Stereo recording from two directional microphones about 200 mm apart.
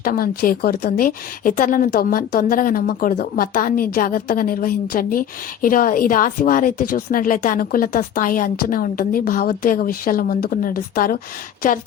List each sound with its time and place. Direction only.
0.0 s speech: 45° left (ahead or behind)